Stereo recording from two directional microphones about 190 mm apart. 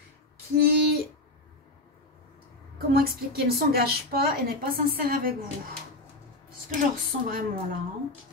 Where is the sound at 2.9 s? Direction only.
55° right (ahead or behind).